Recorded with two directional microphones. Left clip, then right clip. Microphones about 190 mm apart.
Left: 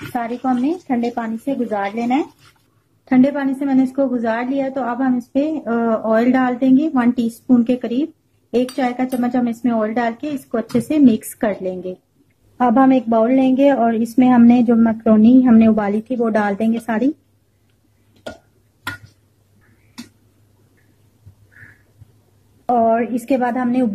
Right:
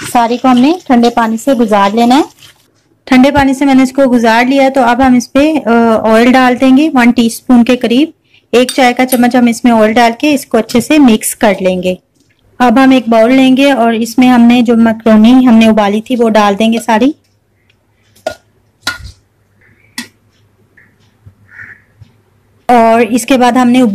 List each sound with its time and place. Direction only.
0.1 s speech: 25° right (ahead or behind)
3.1 s speech: 30° right (ahead or behind); by 17.1 s 15° right (ahead or behind)
22.7 s speech: 25° right (ahead or behind)